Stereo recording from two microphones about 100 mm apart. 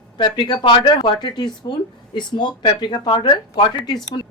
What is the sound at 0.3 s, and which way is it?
Speech, 50° left (ahead or behind).